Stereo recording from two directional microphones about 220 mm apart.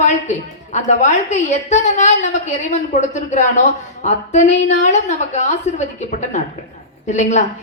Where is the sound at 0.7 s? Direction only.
35° left (ahead or behind).